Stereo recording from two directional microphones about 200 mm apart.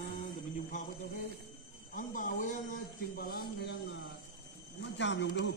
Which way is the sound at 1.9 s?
40° left (ahead or behind).